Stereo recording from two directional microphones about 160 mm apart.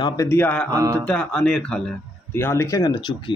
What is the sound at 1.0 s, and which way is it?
Speech, 5° left (ahead or behind).